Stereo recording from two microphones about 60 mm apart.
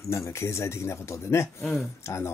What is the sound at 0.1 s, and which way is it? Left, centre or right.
Speech, left.